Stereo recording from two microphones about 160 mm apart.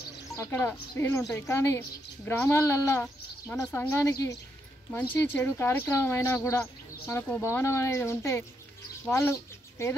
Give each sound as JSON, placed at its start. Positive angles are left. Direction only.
{"t": 0.4, "sound": "a woman's voice", "side_deg": 15}